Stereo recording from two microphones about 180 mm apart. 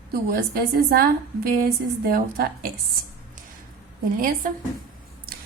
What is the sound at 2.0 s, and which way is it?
Speech, 55° right (ahead or behind).